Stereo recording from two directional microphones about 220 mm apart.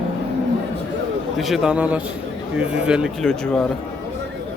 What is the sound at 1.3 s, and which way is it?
Speech, centre (ahead or behind).